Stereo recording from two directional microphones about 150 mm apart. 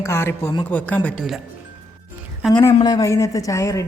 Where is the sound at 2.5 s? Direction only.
25° left (ahead or behind).